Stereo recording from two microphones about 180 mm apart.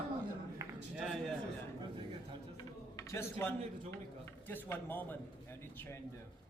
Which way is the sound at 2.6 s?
15° left (ahead or behind).